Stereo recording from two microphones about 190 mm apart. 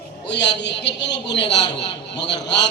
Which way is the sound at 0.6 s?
65° left (ahead or behind).